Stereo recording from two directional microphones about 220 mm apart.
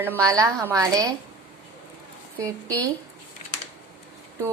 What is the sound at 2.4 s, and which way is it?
Speech, 15° right (ahead or behind).